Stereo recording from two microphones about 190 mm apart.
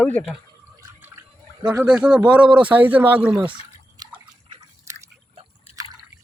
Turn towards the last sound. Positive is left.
turn(degrees=30)  # may be behind; listen again after turning